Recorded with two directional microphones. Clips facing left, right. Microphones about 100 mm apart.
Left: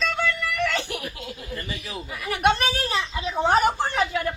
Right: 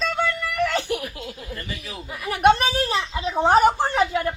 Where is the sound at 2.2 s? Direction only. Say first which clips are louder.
Right 4 dB; 30° right (ahead or behind).